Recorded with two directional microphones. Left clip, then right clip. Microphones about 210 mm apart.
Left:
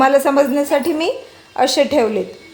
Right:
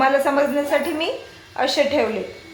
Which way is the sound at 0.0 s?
60° left (ahead or behind).